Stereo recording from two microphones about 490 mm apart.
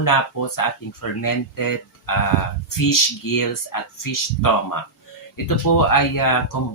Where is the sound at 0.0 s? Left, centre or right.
Left.